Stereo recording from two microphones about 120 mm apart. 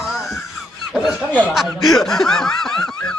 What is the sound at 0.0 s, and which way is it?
Wail, centre (ahead or behind).